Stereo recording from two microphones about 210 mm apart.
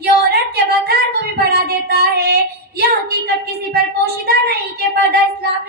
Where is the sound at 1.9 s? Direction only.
50° right (ahead or behind).